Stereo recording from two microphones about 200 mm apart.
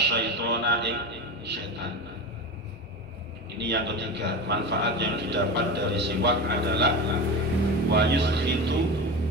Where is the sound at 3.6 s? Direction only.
60° right (ahead or behind).